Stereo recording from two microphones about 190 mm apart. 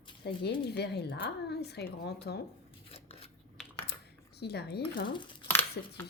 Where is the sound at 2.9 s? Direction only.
30° left (ahead or behind).